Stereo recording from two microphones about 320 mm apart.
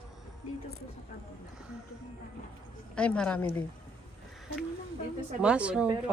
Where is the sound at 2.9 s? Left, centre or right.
Centre.